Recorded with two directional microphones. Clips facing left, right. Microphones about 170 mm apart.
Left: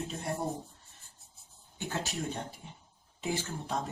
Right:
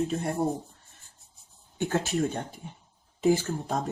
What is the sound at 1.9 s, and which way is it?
Speech, 55° right (ahead or behind).